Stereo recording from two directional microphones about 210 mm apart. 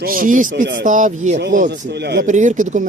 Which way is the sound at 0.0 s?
40° right (ahead or behind).